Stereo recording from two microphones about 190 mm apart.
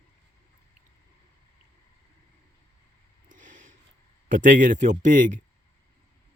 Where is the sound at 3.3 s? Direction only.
45° right (ahead or behind).